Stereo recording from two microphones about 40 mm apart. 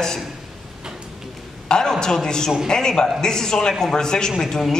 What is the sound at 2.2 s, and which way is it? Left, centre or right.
A woman's voice, centre.